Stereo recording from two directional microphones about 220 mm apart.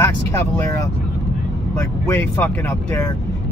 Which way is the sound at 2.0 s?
10° left (ahead or behind).